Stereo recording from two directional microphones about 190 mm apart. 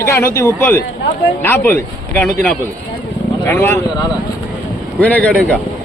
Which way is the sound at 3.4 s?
10° left (ahead or behind).